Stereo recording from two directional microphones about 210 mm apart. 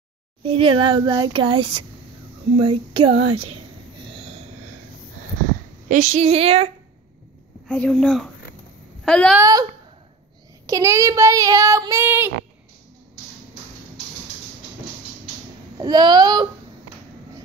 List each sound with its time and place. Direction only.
0.4 s speech: 25° right (ahead or behind)
2.5 s a sound: 25° right (ahead or behind)
5.9 s speech: 35° right (ahead or behind)
7.6 s a woman's voice: 5° left (ahead or behind)
9.4 s child singing: 15° right (ahead or behind)
10.7 s child singing: 15° right (ahead or behind)
15.8 s speech: 20° right (ahead or behind)